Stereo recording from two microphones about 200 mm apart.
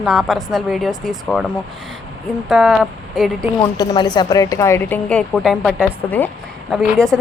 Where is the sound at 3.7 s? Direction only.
20° left (ahead or behind).